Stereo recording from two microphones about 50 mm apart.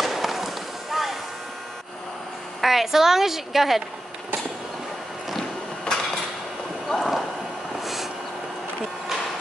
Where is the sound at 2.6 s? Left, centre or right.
Centre.